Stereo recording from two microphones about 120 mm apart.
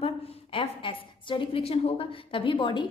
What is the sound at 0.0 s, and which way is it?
A woman's voice, 50° left (ahead or behind).